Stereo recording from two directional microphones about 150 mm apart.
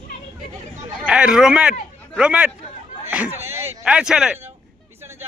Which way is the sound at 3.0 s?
10° right (ahead or behind).